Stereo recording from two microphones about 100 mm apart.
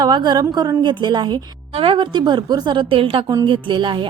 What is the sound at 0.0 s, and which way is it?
A woman's voice, 45° right (ahead or behind).